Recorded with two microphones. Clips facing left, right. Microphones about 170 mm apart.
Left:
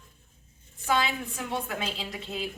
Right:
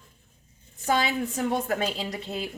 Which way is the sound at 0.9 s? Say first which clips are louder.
Right 3 dB; 40° right (ahead or behind).